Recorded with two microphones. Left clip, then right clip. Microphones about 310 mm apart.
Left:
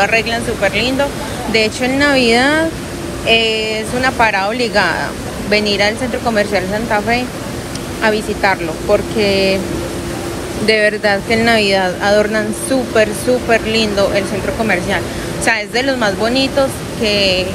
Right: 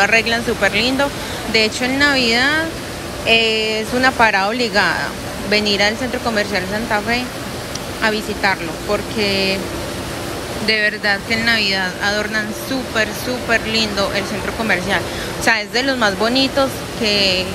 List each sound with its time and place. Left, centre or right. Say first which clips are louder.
0.0 s speech: left 1 dB; centre
10.7 s speech: left 4 dB; centre
15.4 s speech: left 2 dB; centre